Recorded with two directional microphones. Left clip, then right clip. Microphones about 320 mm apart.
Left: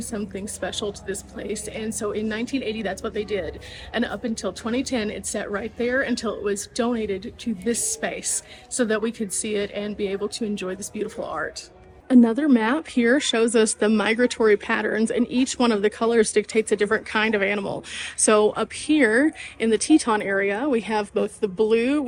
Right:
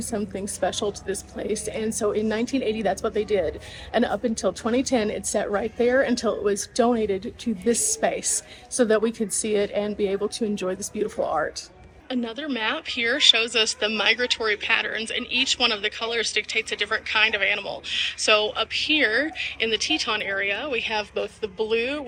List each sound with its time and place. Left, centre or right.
0.1 s a woman's voice: centre
12.0 s a woman's voice: left